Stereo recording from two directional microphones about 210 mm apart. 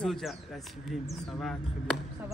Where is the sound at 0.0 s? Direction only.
Centre (ahead or behind).